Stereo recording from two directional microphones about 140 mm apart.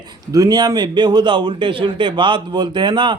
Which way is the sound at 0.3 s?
25° right (ahead or behind).